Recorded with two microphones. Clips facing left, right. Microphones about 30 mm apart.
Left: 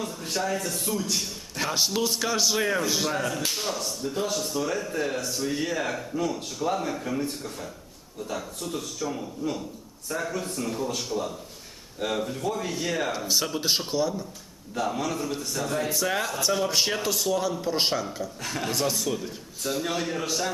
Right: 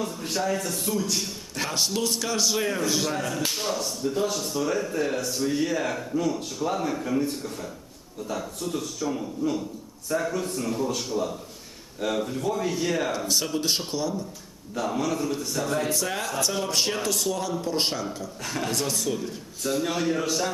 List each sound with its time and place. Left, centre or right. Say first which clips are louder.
0.0 s a man's voice: right 2 dB; centre